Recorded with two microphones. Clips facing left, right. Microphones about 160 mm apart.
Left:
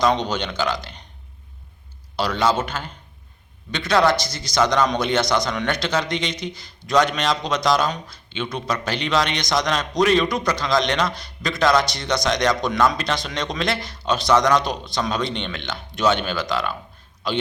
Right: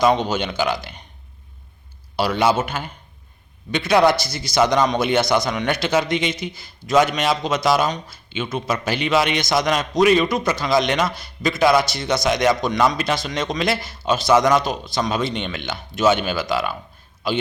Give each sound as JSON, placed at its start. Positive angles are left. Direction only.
{"t": 0.0, "sound": "a man's voice", "side_deg": -10}
{"t": 2.1, "sound": "a man's voice", "side_deg": -10}